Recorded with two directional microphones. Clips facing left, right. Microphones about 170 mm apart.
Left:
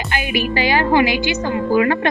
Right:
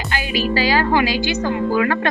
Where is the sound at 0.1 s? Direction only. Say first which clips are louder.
Even; 20° left (ahead or behind).